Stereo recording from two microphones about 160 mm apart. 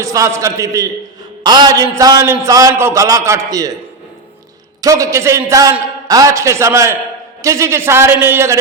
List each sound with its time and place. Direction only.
0.0 s a man's voice: 20° right (ahead or behind)
4.8 s a man's voice: 20° right (ahead or behind)